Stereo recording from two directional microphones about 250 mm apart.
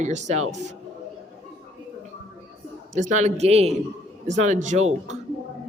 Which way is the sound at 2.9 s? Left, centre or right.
Right.